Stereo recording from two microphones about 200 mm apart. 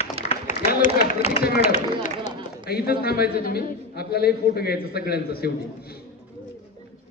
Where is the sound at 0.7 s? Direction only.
50° left (ahead or behind).